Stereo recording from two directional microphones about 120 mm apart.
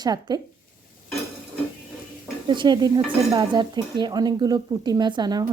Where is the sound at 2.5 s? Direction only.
40° right (ahead or behind).